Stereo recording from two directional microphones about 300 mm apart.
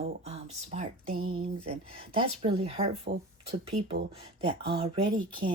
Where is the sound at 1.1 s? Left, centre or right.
Right.